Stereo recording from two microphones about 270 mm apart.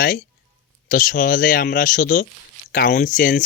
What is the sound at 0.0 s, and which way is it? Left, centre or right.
A man's voice, left.